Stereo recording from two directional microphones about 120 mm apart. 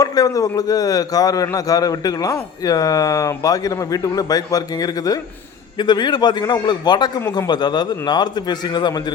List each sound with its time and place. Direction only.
0.0 s a man's voice: 30° left (ahead or behind)